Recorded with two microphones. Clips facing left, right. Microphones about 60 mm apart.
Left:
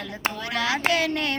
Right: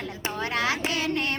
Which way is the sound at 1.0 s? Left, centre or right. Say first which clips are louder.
Left 2 dB; right.